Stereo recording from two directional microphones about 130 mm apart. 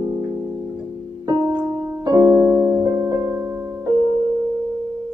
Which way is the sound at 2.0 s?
30° right (ahead or behind).